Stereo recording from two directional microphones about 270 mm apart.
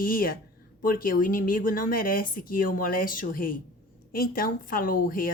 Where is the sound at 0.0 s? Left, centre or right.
Left.